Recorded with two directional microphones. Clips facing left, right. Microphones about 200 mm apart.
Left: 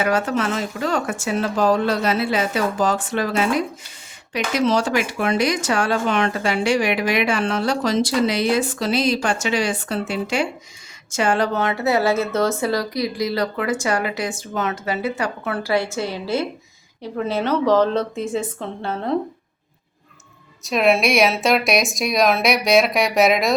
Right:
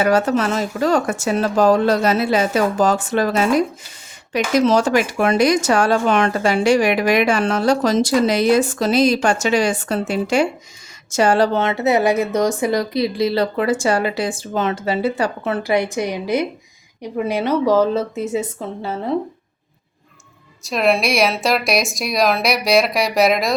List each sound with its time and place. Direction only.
0.0 s speech: 40° right (ahead or behind); by 19.1 s 5° right (ahead or behind)
20.7 s a woman's voice: centre (ahead or behind)